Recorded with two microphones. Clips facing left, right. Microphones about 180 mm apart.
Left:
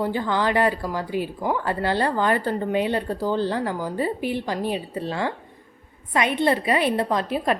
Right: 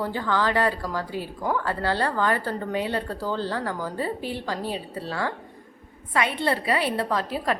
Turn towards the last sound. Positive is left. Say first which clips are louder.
# left 3 dB
turn(degrees=20)  # may be behind; listen again after turning